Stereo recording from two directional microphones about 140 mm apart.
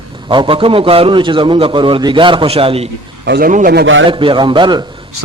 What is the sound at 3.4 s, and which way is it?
Speech, 80° right.